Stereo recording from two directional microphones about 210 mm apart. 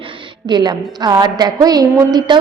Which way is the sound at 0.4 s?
20° right (ahead or behind).